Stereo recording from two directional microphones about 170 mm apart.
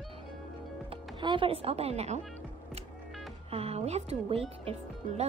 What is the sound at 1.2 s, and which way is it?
Speech, 30° right (ahead or behind).